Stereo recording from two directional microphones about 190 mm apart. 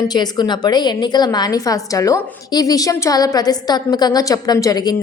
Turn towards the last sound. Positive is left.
turn(degrees=20)  # may be behind; listen again after turning